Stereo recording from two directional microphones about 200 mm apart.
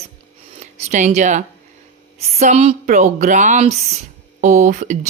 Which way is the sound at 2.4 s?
35° right (ahead or behind).